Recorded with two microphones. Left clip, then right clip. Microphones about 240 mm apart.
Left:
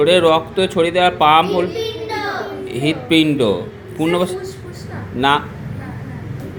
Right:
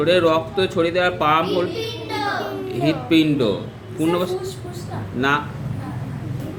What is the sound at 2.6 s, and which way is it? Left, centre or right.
A man's voice, left.